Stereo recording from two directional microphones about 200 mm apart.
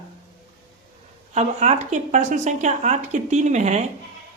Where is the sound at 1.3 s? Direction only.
35° right (ahead or behind).